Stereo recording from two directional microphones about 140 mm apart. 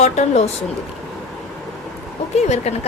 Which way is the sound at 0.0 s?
50° left (ahead or behind).